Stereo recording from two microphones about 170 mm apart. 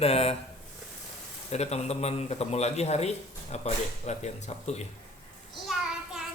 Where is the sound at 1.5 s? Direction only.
40° left (ahead or behind).